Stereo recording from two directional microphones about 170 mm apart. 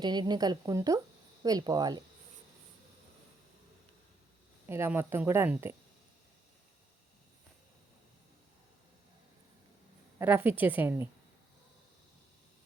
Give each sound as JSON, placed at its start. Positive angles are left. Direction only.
{"t": 0.0, "sound": "speech", "side_deg": -25}
{"t": 4.7, "sound": "a woman's voice", "side_deg": -15}
{"t": 10.2, "sound": "a woman's voice", "side_deg": -10}